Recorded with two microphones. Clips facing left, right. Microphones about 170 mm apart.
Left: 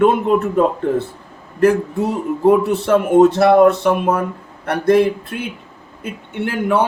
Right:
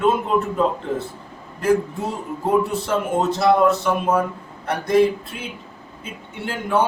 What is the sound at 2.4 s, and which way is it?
Speech, 65° left (ahead or behind).